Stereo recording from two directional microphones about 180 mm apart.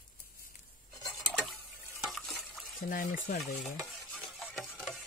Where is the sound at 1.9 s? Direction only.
Centre (ahead or behind).